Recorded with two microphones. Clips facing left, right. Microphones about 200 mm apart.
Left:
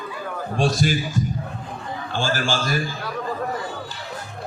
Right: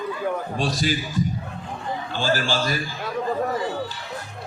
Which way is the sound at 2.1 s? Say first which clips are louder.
Even; 45° left (ahead or behind).